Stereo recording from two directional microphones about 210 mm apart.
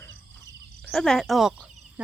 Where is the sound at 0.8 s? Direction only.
Centre (ahead or behind).